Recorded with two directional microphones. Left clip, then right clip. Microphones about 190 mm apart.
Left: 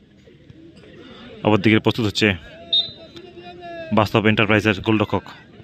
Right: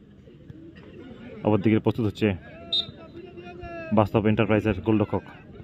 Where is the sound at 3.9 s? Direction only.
5° left (ahead or behind).